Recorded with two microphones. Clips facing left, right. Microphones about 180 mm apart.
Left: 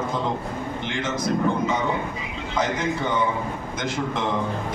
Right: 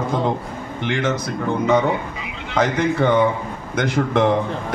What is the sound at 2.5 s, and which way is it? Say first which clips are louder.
A man's voice: right 6 dB; 65° right (ahead or behind).